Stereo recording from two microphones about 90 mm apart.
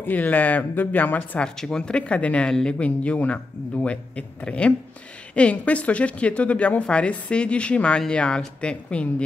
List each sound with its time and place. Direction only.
0.0 s speech: 20° left (ahead or behind)
1.6 s speech: 10° left (ahead or behind)